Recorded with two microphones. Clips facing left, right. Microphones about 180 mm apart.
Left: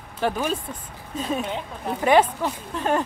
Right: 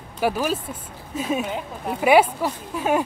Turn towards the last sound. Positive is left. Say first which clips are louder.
# right 2 dB
turn(degrees=-10)  # may be behind; listen again after turning